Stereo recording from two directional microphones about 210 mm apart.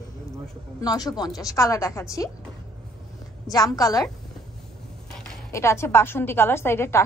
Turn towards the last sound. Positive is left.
turn(degrees=10)  # may be behind; listen again after turning